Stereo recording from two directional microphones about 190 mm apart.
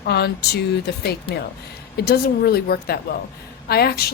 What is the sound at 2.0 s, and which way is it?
Speech, 55° left (ahead or behind).